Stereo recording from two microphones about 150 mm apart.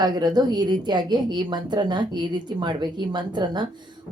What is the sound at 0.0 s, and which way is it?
A woman's voice, 25° right (ahead or behind).